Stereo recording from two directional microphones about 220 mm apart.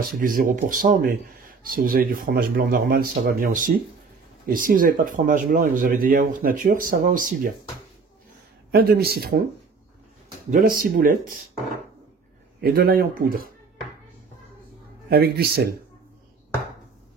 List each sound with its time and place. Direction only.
0.2 s speech: 40° right (ahead or behind)
8.7 s speech: 45° right (ahead or behind)
10.5 s speech: 40° right (ahead or behind)
12.5 s speech: 45° right (ahead or behind)
15.0 s speech: 45° right (ahead or behind)